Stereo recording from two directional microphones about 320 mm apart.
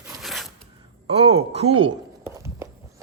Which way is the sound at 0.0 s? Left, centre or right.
Centre.